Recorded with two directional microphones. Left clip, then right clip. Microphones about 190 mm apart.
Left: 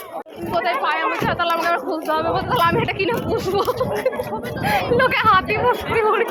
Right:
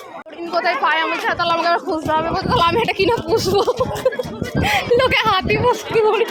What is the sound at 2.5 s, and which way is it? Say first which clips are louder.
Speech: right 3 dB; 20° right (ahead or behind).